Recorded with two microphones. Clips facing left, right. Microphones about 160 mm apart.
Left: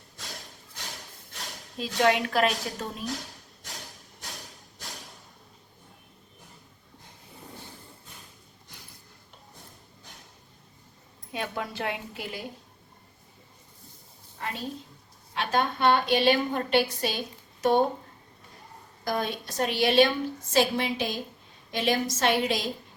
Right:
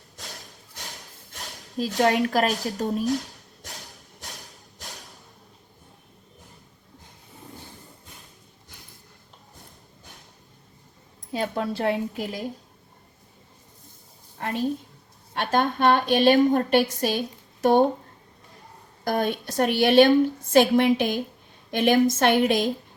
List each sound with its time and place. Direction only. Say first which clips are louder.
1.8 s a woman's voice: right 3 dB; 35° right (ahead or behind)
11.3 s a woman's voice: right 6 dB; 30° right (ahead or behind)
14.3 s a sound: right 6 dB; 50° right (ahead or behind)
15.3 s a woman's voice: right 4 dB; 50° right (ahead or behind)
19.0 s a woman's voice: right 5 dB; 50° right (ahead or behind)